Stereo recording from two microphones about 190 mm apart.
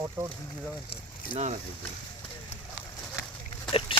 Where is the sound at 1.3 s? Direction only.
35° right (ahead or behind).